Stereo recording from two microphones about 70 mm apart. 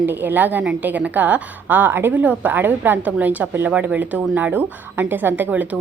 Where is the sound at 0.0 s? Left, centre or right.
Right.